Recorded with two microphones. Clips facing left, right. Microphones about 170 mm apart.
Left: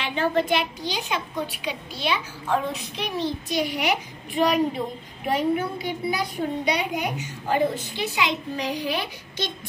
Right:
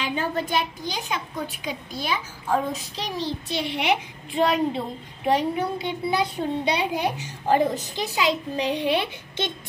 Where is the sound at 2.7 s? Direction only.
30° right (ahead or behind).